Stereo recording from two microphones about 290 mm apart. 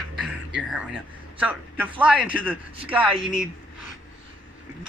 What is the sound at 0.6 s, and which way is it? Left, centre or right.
A man's voice, centre.